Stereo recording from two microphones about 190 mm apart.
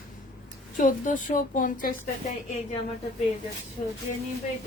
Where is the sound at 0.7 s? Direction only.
40° left (ahead or behind).